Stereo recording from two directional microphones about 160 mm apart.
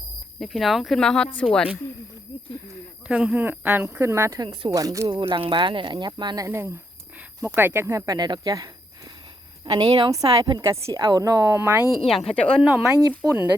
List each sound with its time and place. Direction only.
0.3 s speech: centre (ahead or behind)
3.1 s speech: 10° right (ahead or behind)
11.9 s speech: centre (ahead or behind)